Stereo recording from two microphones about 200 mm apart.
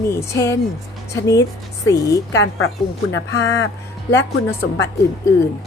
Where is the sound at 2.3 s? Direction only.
70° left (ahead or behind).